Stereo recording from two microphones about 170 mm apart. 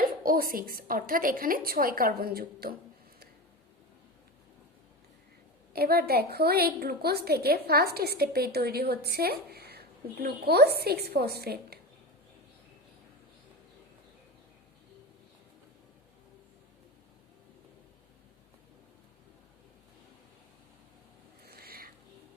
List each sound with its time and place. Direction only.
0.2 s a woman's voice: 60° right (ahead or behind)
5.7 s a woman's voice: 65° right (ahead or behind)
21.4 s a sound: 65° right (ahead or behind)